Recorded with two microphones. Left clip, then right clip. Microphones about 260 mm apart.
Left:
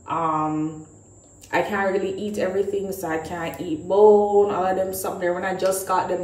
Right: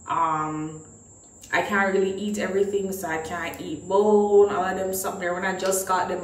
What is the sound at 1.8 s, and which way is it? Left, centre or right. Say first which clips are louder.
Speech: even; right.